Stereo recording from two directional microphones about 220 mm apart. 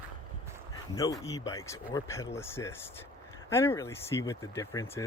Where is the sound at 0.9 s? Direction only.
15° left (ahead or behind).